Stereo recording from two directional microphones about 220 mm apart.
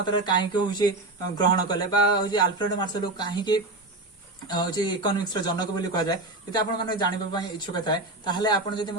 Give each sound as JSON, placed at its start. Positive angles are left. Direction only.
{"t": 0.0, "sound": "speech", "side_deg": 20}